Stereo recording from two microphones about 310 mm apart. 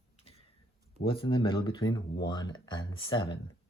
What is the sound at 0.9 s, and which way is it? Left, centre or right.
Speech, centre.